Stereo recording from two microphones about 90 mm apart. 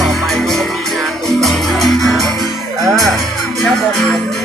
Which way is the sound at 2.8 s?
40° right (ahead or behind).